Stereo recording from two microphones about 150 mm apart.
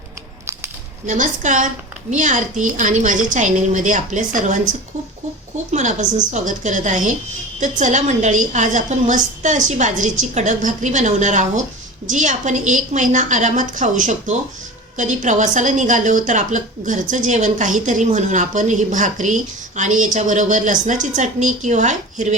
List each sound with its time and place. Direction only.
1.0 s a woman's voice: 55° right (ahead or behind)
5.7 s a woman's voice: 55° right (ahead or behind)